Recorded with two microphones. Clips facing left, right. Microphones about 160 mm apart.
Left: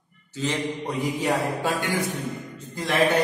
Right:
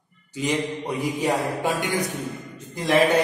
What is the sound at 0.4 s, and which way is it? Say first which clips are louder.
A man's voice: right 2 dB; 15° right (ahead or behind).